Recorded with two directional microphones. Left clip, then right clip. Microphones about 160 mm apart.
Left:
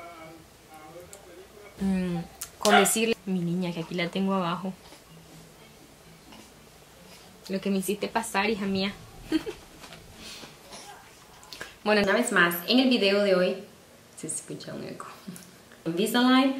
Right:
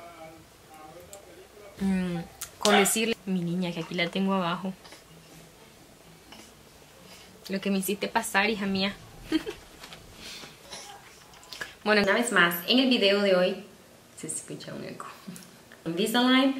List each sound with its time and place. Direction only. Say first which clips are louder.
1.9 s a woman's voice: even; centre (ahead or behind)
7.4 s a woman's voice: left 1 dB; centre (ahead or behind)
11.5 s a woman's voice: even; centre (ahead or behind)